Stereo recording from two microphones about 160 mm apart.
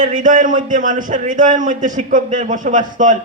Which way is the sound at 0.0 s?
55° right (ahead or behind).